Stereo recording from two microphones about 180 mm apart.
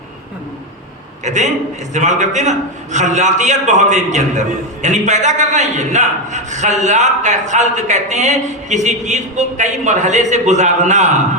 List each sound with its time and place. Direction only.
1.2 s a man's voice: 40° right (ahead or behind)